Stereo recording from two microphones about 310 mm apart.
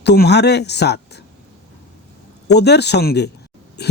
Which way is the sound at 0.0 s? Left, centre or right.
Left.